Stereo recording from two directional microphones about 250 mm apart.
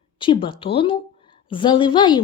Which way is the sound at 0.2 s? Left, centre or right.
Centre.